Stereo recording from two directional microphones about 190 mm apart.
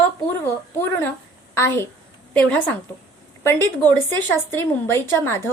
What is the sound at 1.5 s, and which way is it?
A woman's voice, 15° left (ahead or behind).